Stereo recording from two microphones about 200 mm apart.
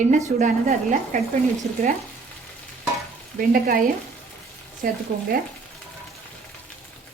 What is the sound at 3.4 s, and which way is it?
Speech, 45° right (ahead or behind).